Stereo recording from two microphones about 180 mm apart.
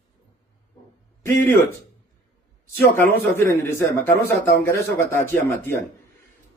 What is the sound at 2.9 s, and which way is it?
Speech, 10° left (ahead or behind).